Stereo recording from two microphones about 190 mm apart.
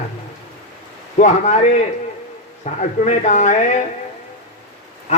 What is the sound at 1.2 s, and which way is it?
Speech, 40° left (ahead or behind).